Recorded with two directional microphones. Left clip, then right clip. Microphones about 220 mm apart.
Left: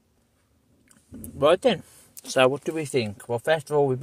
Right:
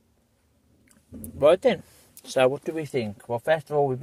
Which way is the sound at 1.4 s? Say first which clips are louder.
Right 1 dB; 15° left (ahead or behind).